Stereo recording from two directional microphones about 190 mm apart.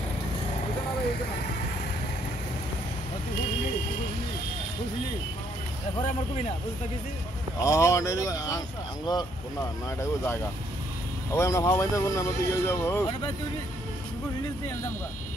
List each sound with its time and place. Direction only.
7.6 s speech: 15° left (ahead or behind)